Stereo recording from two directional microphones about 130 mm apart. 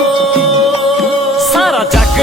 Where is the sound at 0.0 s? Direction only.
Centre (ahead or behind).